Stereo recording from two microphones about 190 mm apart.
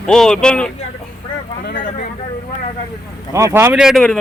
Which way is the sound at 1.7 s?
45° left (ahead or behind).